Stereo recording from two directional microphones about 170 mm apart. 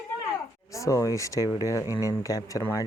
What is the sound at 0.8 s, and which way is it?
Speech, 20° left (ahead or behind).